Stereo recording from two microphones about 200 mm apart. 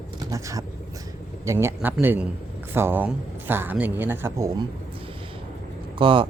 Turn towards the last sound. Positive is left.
turn(degrees=-25)  # may be behind; listen again after turning